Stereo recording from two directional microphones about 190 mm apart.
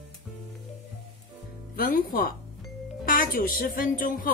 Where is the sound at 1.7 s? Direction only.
50° left (ahead or behind).